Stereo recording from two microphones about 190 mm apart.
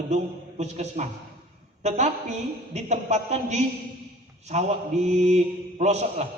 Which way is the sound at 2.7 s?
35° right (ahead or behind).